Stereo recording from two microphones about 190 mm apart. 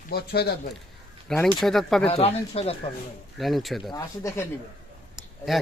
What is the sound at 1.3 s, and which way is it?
Speech, centre (ahead or behind).